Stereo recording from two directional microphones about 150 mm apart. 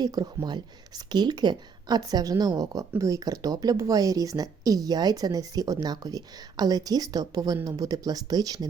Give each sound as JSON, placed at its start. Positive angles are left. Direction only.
{"t": 0.0, "sound": "a woman's voice", "side_deg": -25}